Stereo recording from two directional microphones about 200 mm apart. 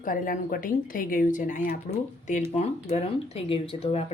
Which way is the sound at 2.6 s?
30° left (ahead or behind).